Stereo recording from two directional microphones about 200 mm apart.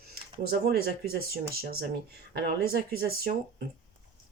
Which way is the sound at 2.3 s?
50° right (ahead or behind).